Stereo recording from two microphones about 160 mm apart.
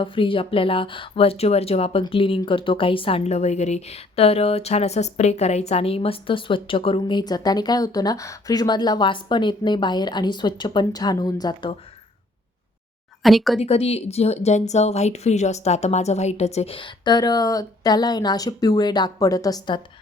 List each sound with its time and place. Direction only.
0.0 s speech: 35° left (ahead or behind)
13.2 s speech: centre (ahead or behind)
13.6 s a woman's voice: 40° left (ahead or behind)